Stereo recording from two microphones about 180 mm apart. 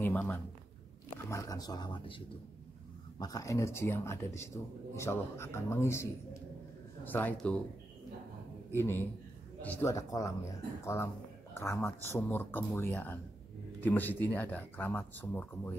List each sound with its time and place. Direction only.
0.0 s speech: 10° left (ahead or behind)
7.1 s speech: 10° left (ahead or behind)
8.7 s speech: 15° left (ahead or behind)